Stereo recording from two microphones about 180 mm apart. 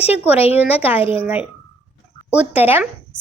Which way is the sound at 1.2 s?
5° right (ahead or behind).